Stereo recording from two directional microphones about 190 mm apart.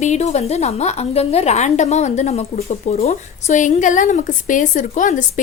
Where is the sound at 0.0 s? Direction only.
40° left (ahead or behind).